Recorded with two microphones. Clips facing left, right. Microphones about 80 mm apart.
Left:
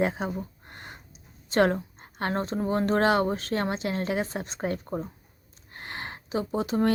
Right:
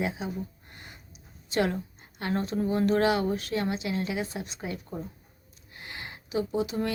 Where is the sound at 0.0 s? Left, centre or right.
Left.